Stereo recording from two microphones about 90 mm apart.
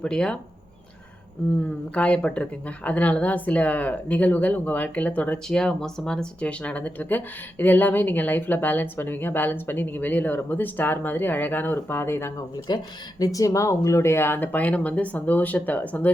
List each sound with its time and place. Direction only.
0.0 s a woman's voice: 10° left (ahead or behind)
2.0 s a woman's voice: 10° left (ahead or behind)
5.5 s speech: 5° left (ahead or behind); by 12.3 s 30° left (ahead or behind)
12.5 s speech: 45° left (ahead or behind); by 16.0 s 20° left (ahead or behind)